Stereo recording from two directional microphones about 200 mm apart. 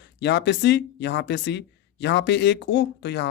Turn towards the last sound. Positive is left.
turn(degrees=60)  # may be behind; listen again after turning